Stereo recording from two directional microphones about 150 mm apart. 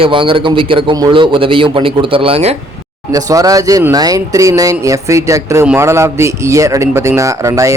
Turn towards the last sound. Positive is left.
turn(degrees=-20)  # may be behind; listen again after turning